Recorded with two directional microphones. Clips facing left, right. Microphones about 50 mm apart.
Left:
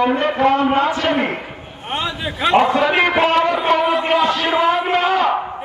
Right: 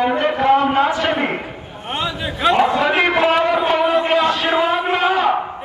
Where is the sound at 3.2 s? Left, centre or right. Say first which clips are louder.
Even; centre.